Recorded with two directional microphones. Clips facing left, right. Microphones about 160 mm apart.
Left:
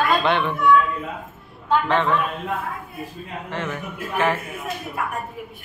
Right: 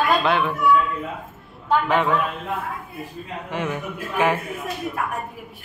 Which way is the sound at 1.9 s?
10° right (ahead or behind).